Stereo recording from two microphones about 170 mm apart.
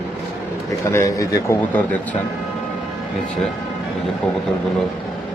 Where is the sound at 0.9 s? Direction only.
20° left (ahead or behind).